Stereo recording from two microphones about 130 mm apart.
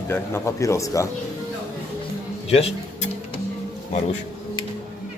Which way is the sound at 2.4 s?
50° left (ahead or behind).